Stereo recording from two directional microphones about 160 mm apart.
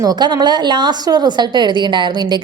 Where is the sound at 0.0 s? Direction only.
25° right (ahead or behind).